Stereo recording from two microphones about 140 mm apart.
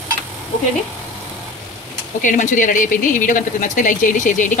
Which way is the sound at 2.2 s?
65° left (ahead or behind).